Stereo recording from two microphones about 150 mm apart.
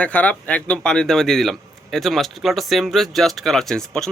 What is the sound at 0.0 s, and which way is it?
Speech, 10° left (ahead or behind).